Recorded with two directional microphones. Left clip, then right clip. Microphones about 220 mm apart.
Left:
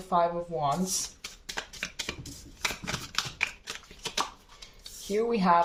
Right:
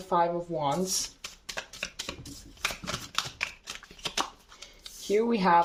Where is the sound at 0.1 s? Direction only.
40° right (ahead or behind).